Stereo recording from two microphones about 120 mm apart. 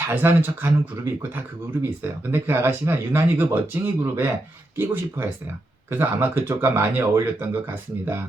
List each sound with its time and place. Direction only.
0.1 s speech: 20° right (ahead or behind)
2.3 s speech: 20° right (ahead or behind)